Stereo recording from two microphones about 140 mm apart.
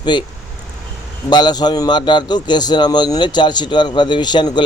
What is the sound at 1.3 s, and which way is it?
A man's voice, 30° left (ahead or behind).